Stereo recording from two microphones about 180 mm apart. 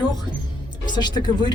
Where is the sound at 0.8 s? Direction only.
25° left (ahead or behind).